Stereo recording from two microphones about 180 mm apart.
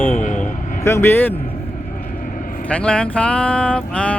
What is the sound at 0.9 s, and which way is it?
Speech, 15° left (ahead or behind).